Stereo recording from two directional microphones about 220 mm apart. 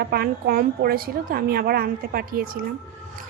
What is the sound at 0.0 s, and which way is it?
A woman's voice, 45° right (ahead or behind).